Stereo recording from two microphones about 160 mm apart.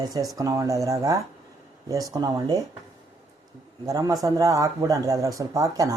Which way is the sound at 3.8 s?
20° right (ahead or behind).